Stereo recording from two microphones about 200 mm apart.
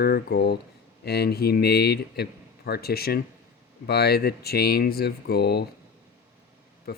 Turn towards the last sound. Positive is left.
turn(degrees=50)  # may be behind; listen again after turning